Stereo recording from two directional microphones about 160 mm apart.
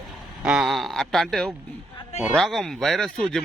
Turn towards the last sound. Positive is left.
turn(degrees=5)  # may be behind; listen again after turning